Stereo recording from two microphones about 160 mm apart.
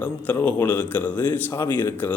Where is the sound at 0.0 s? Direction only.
10° left (ahead or behind).